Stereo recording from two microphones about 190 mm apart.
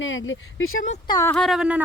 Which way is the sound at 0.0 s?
90° left.